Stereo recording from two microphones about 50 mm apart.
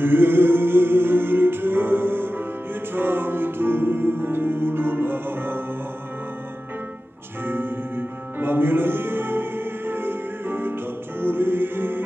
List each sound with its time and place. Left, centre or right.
0.0 s music: right
7.4 s music: right